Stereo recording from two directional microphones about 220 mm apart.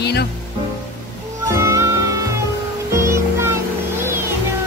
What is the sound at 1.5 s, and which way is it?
Music, 15° right (ahead or behind).